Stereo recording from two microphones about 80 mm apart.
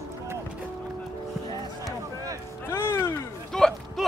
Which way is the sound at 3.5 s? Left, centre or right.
Centre.